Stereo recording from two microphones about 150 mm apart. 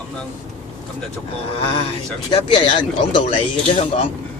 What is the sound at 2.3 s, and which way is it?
Speech, 40° left (ahead or behind).